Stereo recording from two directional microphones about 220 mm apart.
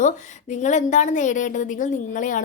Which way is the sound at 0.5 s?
35° left (ahead or behind).